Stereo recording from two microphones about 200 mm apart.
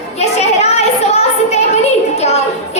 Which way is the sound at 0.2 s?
35° left (ahead or behind).